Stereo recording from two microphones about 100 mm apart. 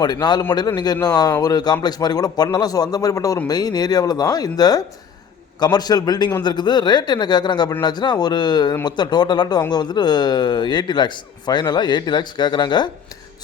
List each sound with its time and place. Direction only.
0.0 s speech: 45° left (ahead or behind)